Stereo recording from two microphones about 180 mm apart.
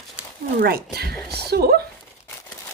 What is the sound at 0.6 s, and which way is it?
Speech, 60° right (ahead or behind).